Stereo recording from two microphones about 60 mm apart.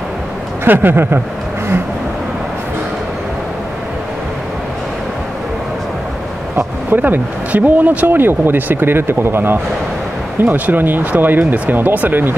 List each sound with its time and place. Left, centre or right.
0.7 s speech: right
6.5 s speech: right
8.2 s speech: right